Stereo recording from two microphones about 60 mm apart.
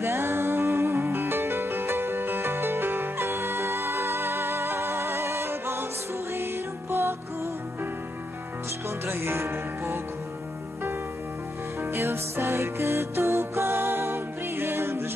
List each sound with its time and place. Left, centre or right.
0.0 s music: right
9.0 s music: right
11.8 s music: right